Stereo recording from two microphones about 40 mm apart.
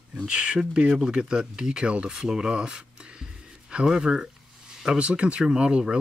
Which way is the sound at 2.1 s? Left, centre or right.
Centre.